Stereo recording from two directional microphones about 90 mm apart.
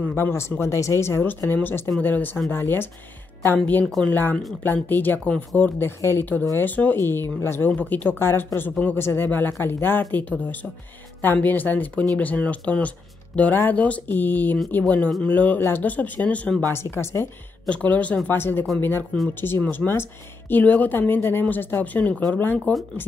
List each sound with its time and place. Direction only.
0.0 s speech: 25° left (ahead or behind)
3.8 s speech: 5° left (ahead or behind)
4.1 s speech: 20° left (ahead or behind)
16.7 s speech: 30° left (ahead or behind)
17.6 s speech: 15° left (ahead or behind)